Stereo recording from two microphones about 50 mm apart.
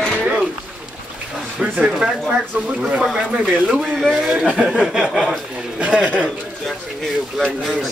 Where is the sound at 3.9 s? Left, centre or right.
Centre.